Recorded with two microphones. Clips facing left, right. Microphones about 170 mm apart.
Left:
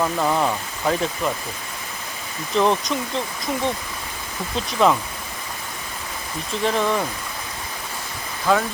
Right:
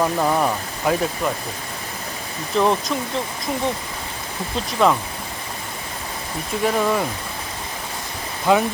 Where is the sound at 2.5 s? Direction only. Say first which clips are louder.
Even; centre (ahead or behind).